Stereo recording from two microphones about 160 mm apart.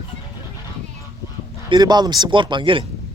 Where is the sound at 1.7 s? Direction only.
25° right (ahead or behind).